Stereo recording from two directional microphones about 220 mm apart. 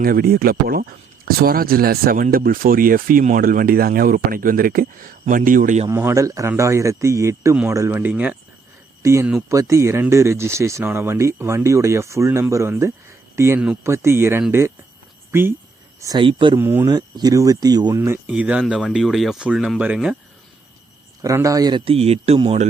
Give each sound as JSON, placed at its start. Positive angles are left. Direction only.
{"t": 0.0, "sound": "speech", "side_deg": -40}
{"t": 5.9, "sound": "speech", "side_deg": -10}
{"t": 16.6, "sound": "speech", "side_deg": -10}
{"t": 21.2, "sound": "speech", "side_deg": -15}